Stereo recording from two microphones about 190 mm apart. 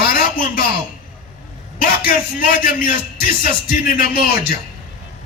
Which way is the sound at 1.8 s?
50° left (ahead or behind).